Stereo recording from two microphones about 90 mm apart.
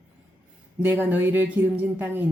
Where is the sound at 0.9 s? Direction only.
20° right (ahead or behind).